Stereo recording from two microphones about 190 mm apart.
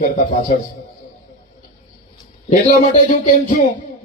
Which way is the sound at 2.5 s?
40° left (ahead or behind).